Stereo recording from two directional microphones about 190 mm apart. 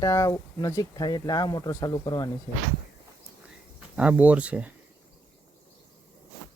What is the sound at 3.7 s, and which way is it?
Speech, 5° right (ahead or behind).